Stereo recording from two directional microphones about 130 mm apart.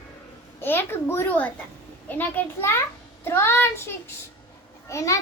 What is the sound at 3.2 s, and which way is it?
Child singing, 20° left (ahead or behind).